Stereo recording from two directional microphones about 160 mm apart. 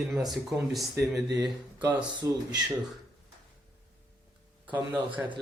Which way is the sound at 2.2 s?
20° right (ahead or behind).